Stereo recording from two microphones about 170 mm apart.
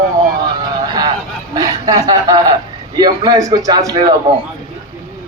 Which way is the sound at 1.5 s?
20° right (ahead or behind).